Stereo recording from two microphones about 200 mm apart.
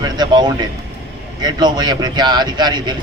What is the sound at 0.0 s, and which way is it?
A man's voice, 20° right (ahead or behind).